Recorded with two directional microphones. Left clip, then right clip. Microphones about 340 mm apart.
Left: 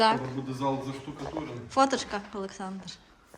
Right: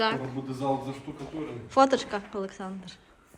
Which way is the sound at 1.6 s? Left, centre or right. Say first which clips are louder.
Right 3 dB; centre.